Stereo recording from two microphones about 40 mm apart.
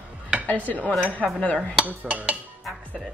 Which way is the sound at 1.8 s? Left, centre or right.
Right.